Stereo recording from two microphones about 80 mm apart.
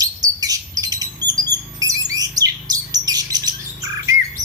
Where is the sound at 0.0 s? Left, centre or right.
Right.